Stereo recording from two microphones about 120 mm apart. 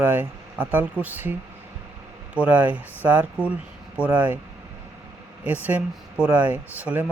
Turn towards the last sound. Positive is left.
turn(degrees=-15)  # may be behind; listen again after turning